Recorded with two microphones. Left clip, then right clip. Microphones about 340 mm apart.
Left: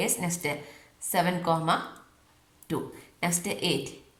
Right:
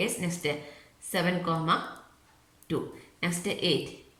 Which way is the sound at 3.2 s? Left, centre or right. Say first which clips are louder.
Left 1 dB; centre.